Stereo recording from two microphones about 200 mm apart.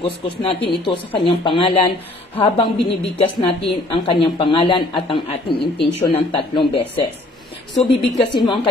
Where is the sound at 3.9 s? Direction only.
25° left (ahead or behind).